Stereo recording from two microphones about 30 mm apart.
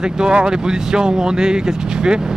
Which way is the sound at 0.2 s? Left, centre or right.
Right.